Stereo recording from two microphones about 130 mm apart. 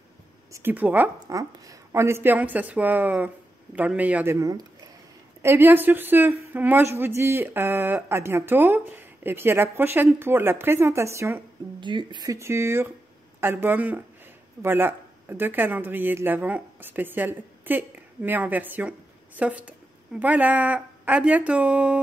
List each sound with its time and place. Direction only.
0.5 s a woman's voice: 20° right (ahead or behind)
1.2 s a woman's voice: 25° right (ahead or behind)
4.4 s speech: 30° right (ahead or behind)
5.4 s a woman's voice: 20° right (ahead or behind)
11.8 s a woman's voice: 35° right (ahead or behind); by 22.0 s 10° right (ahead or behind)